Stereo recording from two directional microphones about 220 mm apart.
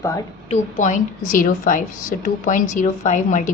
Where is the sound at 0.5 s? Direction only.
35° left (ahead or behind).